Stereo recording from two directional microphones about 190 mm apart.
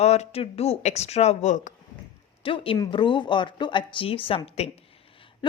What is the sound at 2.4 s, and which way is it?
Speech, 30° left (ahead or behind).